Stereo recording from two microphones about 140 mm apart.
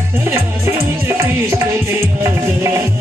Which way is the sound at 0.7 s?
20° right (ahead or behind).